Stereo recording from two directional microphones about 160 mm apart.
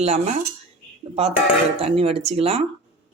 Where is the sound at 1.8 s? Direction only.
40° right (ahead or behind).